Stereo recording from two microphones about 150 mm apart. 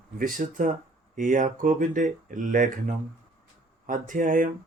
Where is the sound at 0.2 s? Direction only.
65° right (ahead or behind).